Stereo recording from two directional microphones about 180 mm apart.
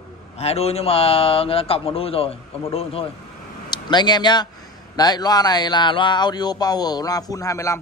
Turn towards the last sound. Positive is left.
turn(degrees=15)  # may be behind; listen again after turning